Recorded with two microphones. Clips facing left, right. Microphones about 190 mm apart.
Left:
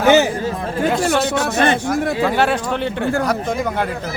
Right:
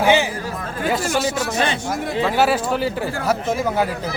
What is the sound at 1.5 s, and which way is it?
Speech, 55° left (ahead or behind).